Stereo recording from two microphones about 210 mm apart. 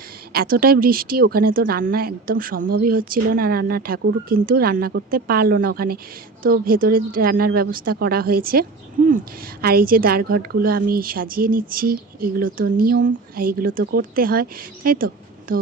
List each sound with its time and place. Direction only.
0.3 s a woman's voice: 45° right (ahead or behind)